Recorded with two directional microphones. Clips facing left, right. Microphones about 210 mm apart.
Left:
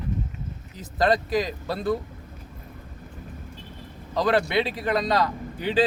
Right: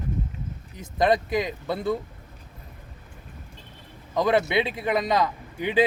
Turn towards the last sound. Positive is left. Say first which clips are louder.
# even
turn(degrees=-20)  # may be behind; listen again after turning